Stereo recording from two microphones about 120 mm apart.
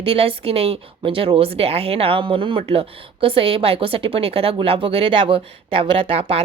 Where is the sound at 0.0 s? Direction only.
50° right (ahead or behind).